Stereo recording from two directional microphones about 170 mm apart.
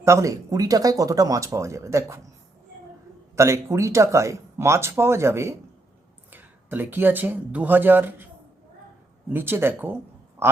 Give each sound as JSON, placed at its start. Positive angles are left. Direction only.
{"t": 0.0, "sound": "speech", "side_deg": -15}
{"t": 3.3, "sound": "speech", "side_deg": -15}
{"t": 9.3, "sound": "speech", "side_deg": -10}
{"t": 10.4, "sound": "a sound", "side_deg": -15}